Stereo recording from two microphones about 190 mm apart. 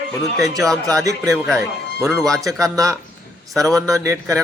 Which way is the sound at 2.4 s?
15° right (ahead or behind).